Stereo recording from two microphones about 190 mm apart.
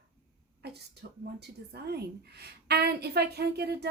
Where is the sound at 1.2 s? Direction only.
55° right (ahead or behind).